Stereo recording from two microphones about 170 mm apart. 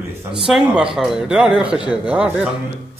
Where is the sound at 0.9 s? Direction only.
5° right (ahead or behind).